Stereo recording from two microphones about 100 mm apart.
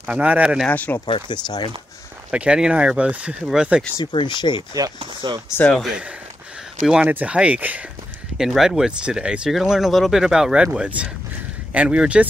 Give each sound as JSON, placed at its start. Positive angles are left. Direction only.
{"t": 0.1, "sound": "speech", "side_deg": -15}
{"t": 0.7, "sound": "speech", "side_deg": 15}
{"t": 1.0, "sound": "speech", "side_deg": 50}
{"t": 2.3, "sound": "speech", "side_deg": -10}
{"t": 4.0, "sound": "speech", "side_deg": 50}
{"t": 5.2, "sound": "speech", "side_deg": -50}
{"t": 5.8, "sound": "speech", "side_deg": -5}
{"t": 8.4, "sound": "speech", "side_deg": -5}